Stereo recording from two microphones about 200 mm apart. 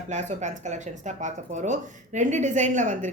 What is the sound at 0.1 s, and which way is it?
Speech, 35° right (ahead or behind).